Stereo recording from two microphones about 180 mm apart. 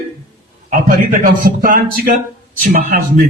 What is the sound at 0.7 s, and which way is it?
A man's voice, 50° right (ahead or behind).